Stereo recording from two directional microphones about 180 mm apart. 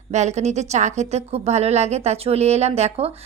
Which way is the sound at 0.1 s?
40° right (ahead or behind).